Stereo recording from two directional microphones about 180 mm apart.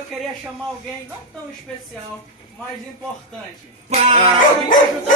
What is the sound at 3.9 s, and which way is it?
Music, 30° right (ahead or behind).